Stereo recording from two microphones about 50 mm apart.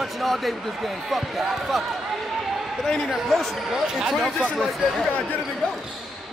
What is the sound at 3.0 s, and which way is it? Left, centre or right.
Speech, centre.